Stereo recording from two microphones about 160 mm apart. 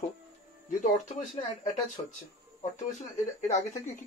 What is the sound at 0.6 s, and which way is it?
Speech, 50° left (ahead or behind).